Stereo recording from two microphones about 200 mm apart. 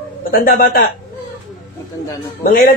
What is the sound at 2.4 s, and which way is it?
Speech, 45° left (ahead or behind).